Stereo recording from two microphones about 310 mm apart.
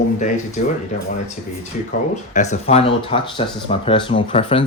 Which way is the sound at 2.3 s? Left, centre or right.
Left.